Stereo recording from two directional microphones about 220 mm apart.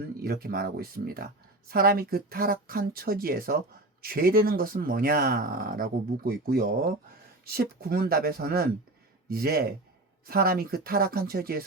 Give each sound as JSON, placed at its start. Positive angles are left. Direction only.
{"t": 0.0, "sound": "speech", "side_deg": -45}